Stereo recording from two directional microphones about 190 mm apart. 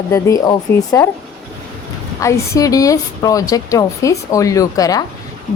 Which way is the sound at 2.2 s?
15° left (ahead or behind).